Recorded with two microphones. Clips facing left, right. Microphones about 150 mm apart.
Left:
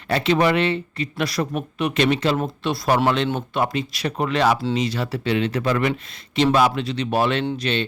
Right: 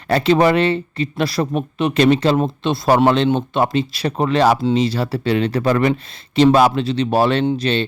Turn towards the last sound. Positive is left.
turn(degrees=-35)  # may be behind; listen again after turning